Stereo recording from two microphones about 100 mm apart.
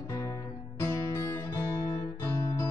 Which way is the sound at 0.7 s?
25° left (ahead or behind).